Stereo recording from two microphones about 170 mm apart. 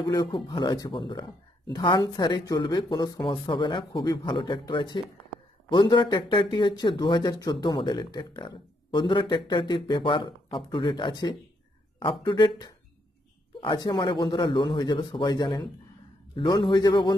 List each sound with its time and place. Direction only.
0.0 s speech: 25° left (ahead or behind)